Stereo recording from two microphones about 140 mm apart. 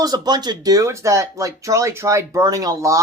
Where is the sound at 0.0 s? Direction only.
30° right (ahead or behind).